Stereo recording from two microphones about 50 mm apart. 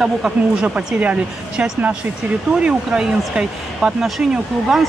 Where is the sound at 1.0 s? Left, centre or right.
Right.